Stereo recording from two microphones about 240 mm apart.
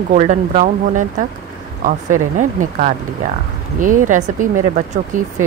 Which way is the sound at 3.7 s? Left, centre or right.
Right.